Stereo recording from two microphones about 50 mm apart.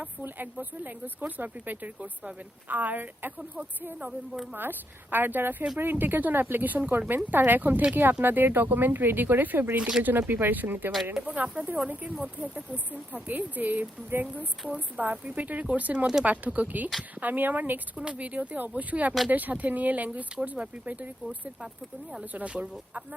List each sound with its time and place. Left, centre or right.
0.0 s speech: right
4.5 s speech: right
17.9 s speech: right
22.4 s speech: right